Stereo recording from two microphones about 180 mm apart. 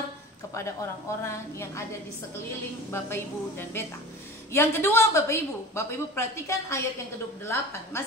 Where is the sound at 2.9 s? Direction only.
15° left (ahead or behind).